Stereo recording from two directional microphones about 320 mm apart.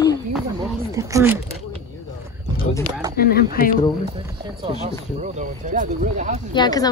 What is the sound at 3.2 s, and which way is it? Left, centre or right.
Speech, left.